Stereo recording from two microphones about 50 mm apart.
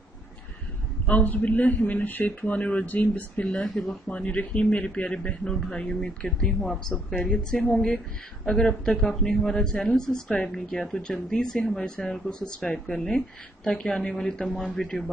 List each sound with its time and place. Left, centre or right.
1.0 s speech: left; by 4.0 s centre
4.1 s a woman's voice: left; by 7.8 s centre
8.5 s speech: centre